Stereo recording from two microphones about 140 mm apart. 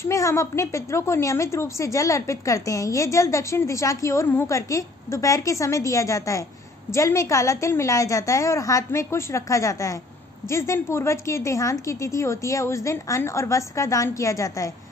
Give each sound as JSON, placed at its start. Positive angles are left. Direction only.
{"t": 0.0, "sound": "a woman's voice", "side_deg": 20}